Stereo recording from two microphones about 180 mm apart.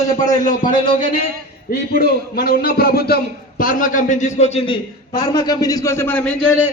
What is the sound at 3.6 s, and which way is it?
A man's voice, 50° left (ahead or behind).